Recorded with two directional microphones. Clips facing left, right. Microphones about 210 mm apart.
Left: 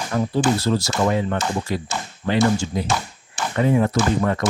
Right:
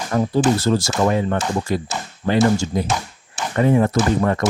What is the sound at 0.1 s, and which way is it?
Speech, 45° right (ahead or behind).